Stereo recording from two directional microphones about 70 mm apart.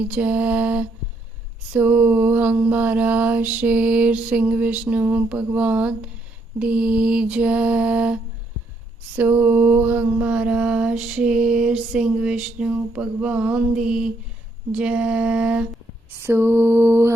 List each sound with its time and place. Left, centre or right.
0.0 s a sound: right
9.1 s mantra: right
16.2 s mantra: right